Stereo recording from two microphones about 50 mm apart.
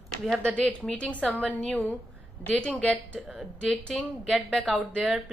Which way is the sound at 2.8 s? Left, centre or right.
Left.